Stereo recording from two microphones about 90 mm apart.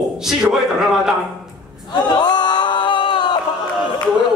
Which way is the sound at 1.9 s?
55° left (ahead or behind).